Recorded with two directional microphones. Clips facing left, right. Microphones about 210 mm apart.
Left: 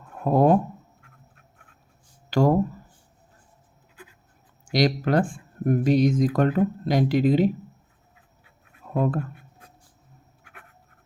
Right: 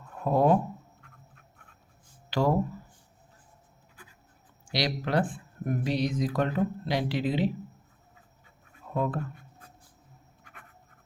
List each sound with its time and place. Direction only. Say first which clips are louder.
0.2 s speech: left 4 dB; 45° left (ahead or behind)
2.3 s speech: left 6 dB; 45° left (ahead or behind)
4.7 s speech: left 7 dB; 45° left (ahead or behind)
9.0 s speech: left 5 dB; 45° left (ahead or behind)
10.4 s writing: left 3 dB; 5° left (ahead or behind)